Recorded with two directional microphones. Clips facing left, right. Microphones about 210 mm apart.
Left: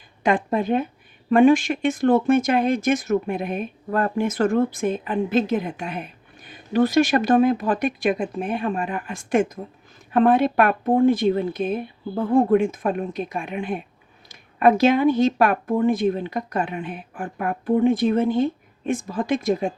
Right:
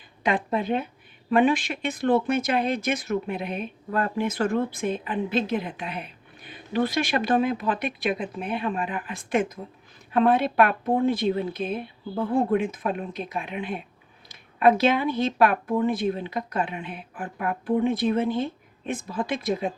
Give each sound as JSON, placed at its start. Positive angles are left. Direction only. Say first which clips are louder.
{"t": 0.2, "sound": "speech", "louder": "left 4 dB", "side_deg": 45}